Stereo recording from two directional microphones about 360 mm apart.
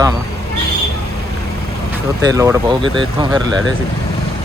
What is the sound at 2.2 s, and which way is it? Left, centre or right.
Speech, centre.